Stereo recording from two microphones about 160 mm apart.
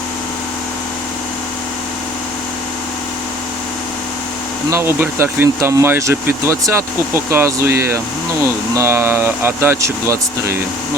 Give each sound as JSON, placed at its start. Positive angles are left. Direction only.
{"t": 4.7, "sound": "speech", "side_deg": -15}